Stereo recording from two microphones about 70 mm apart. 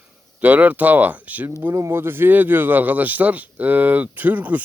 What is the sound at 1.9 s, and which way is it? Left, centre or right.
Speech, right.